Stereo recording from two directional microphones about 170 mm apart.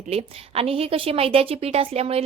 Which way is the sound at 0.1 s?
35° right (ahead or behind).